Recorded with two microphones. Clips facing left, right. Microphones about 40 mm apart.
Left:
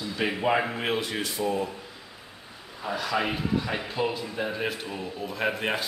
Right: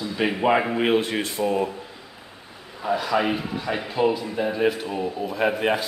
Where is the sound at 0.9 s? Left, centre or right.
Right.